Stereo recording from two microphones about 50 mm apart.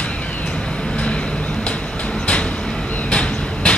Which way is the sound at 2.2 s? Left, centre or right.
Left.